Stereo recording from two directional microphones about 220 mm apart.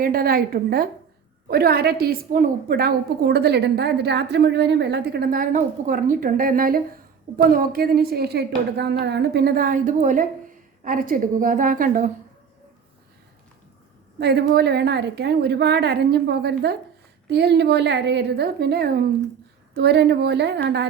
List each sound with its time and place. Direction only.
0.0 s a woman's voice: 40° right (ahead or behind)
14.2 s a woman's voice: 50° right (ahead or behind)